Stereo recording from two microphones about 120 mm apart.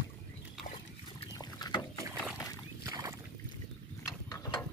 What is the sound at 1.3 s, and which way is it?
Boat, 35° left (ahead or behind).